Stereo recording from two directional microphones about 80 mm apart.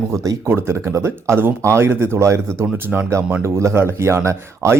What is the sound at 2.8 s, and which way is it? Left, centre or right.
Speech, right.